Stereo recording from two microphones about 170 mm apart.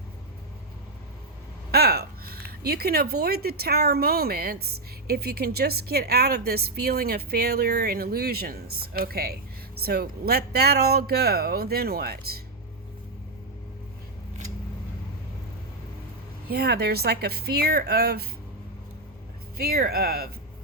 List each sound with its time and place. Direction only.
1.7 s a woman's voice: 65° right (ahead or behind)
16.5 s a woman's voice: 70° right (ahead or behind)
19.5 s speech: 65° right (ahead or behind)